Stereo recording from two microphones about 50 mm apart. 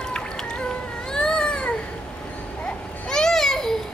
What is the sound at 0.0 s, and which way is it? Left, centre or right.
Music, centre.